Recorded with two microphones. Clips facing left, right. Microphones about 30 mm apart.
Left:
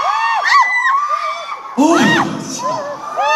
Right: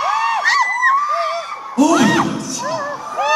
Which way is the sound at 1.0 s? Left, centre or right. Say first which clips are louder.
Left 1 dB; centre.